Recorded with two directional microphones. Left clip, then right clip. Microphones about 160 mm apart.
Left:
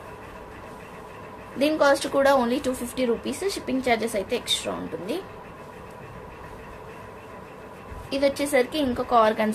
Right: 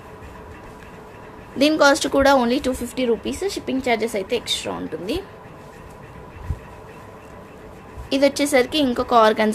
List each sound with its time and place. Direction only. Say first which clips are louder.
1.6 s speech: right 5 dB; 65° right (ahead or behind); by 5.2 s 40° right (ahead or behind)
8.1 s a woman's voice: right 5 dB; 65° right (ahead or behind)